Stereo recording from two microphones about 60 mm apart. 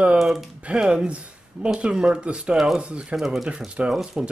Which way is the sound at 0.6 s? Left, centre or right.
Centre.